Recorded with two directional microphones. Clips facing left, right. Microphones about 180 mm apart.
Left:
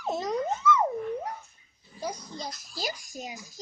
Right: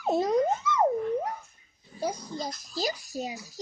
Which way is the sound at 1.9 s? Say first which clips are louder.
Right 4 dB; 30° right (ahead or behind).